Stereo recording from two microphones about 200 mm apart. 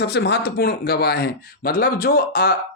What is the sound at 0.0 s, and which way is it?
A man's voice, 55° left (ahead or behind).